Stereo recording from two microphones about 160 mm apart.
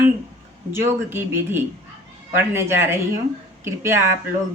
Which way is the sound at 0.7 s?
15° right (ahead or behind).